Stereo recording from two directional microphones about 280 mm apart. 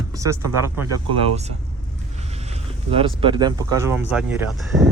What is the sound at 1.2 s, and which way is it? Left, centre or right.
Speech, right.